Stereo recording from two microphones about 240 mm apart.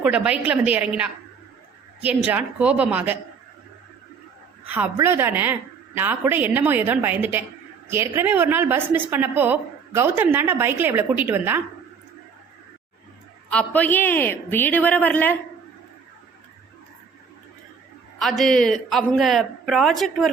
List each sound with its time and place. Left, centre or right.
0.0 s a man's voice: centre
4.6 s a woman's voice: centre
13.5 s speech: centre
18.2 s a man's voice: centre